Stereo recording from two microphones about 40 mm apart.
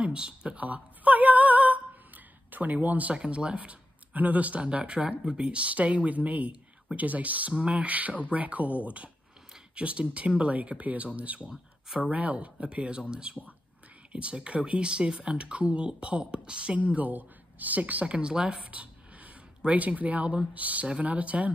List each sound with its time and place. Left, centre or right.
0.0 s a sound: right
2.5 s speech: right
3.1 s speech: right
16.9 s speech: right
18.0 s speech: right
18.6 s a sound: right
19.6 s speech: right